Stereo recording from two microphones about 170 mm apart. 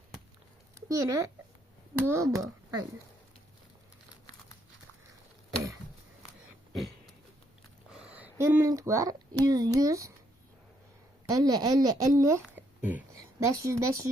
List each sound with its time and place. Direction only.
0.8 s speech: 20° right (ahead or behind)
7.9 s speech: 5° right (ahead or behind)
11.3 s speech: 20° right (ahead or behind)